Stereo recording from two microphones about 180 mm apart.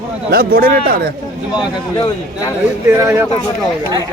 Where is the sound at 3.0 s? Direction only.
15° right (ahead or behind).